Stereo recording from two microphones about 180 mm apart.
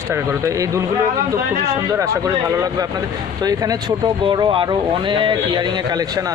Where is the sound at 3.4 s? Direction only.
20° right (ahead or behind).